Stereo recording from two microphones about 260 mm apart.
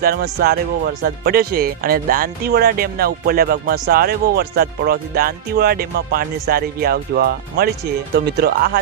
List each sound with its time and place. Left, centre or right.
0.0 s speech: right